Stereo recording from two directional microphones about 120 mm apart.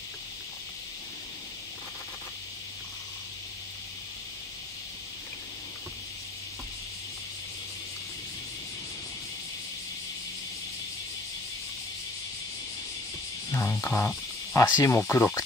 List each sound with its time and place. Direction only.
13.5 s speech: 25° left (ahead or behind)